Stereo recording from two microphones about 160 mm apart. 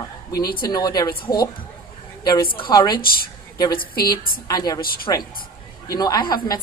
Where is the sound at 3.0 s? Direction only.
70° left (ahead or behind).